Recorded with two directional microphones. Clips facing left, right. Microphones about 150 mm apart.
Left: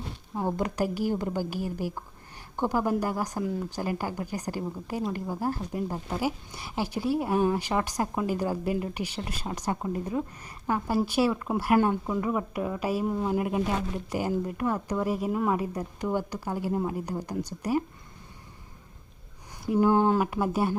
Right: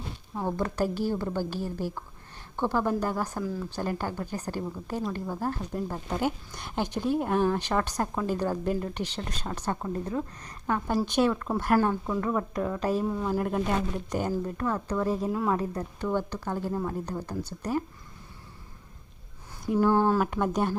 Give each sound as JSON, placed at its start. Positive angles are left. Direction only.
{"t": 0.3, "sound": "speech", "side_deg": 15}
{"t": 3.4, "sound": "speech", "side_deg": 25}
{"t": 3.7, "sound": "speech", "side_deg": 10}
{"t": 13.4, "sound": "speech", "side_deg": 5}
{"t": 19.8, "sound": "speech", "side_deg": 15}
{"t": 20.2, "sound": "speech", "side_deg": 5}